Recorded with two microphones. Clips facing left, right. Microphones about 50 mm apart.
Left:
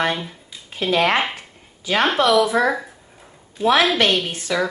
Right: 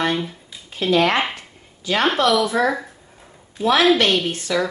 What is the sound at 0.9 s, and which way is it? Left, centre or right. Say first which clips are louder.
Speech: right 1 dB; centre.